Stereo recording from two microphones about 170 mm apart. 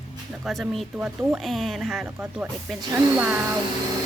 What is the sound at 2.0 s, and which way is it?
Speech, 15° right (ahead or behind).